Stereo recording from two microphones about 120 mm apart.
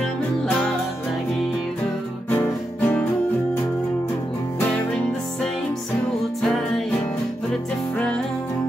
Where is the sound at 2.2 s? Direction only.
15° left (ahead or behind).